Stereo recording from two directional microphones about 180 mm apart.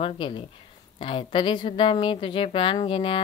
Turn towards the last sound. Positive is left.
turn(degrees=30)  # may be behind; listen again after turning